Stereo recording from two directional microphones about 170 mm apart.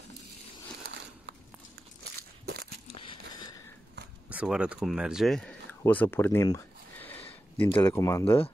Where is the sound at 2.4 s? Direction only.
65° right (ahead or behind).